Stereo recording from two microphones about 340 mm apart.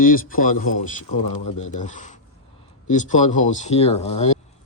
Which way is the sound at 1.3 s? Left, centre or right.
Left.